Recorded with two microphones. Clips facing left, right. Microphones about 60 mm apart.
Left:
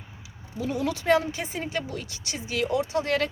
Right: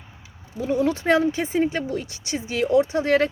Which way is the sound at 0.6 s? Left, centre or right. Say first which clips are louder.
Right 6 dB; right.